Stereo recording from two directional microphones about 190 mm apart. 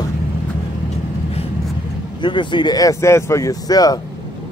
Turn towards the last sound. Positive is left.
turn(degrees=20)  # may be behind; listen again after turning